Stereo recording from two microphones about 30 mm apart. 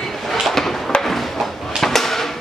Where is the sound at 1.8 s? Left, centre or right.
Centre.